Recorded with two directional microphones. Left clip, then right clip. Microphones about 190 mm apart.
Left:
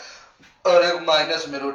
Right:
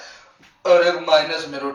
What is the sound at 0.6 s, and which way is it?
Speech, 20° right (ahead or behind).